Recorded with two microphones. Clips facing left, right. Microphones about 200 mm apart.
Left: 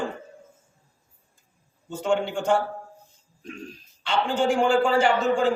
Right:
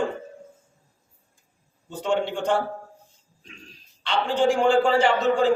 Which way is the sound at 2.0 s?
5° left (ahead or behind).